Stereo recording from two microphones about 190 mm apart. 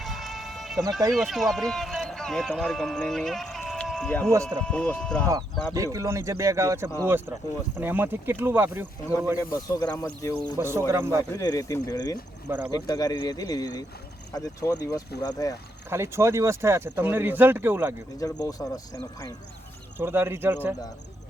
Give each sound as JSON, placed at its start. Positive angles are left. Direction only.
{"t": 0.0, "sound": "music", "side_deg": 0}
{"t": 1.1, "sound": "speech", "side_deg": 0}
{"t": 5.7, "sound": "speech", "side_deg": -15}
{"t": 9.4, "sound": "speech", "side_deg": 15}
{"t": 10.6, "sound": "speech", "side_deg": -15}
{"t": 11.3, "sound": "speech", "side_deg": 15}
{"t": 12.5, "sound": "speech", "side_deg": -10}
{"t": 12.7, "sound": "speech", "side_deg": 20}
{"t": 15.9, "sound": "speech", "side_deg": -15}
{"t": 18.2, "sound": "speech", "side_deg": 15}
{"t": 20.0, "sound": "speech", "side_deg": -10}